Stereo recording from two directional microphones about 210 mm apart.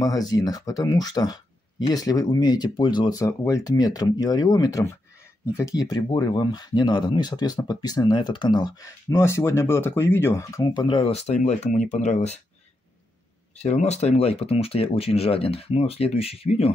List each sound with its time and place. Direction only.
0.3 s speech: 20° left (ahead or behind)
13.6 s speech: 30° left (ahead or behind)